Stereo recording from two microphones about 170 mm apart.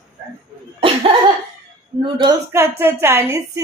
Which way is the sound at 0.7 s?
35° right (ahead or behind).